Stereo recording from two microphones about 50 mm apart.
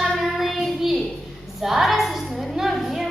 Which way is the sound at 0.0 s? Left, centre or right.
Centre.